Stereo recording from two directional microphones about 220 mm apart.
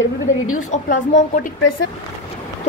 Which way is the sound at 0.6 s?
35° left (ahead or behind).